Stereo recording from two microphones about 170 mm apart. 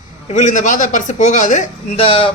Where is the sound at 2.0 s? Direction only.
30° left (ahead or behind).